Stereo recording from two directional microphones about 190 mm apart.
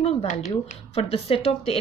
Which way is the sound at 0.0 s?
35° left (ahead or behind).